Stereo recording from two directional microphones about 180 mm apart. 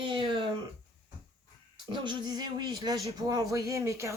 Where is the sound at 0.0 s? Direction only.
30° right (ahead or behind).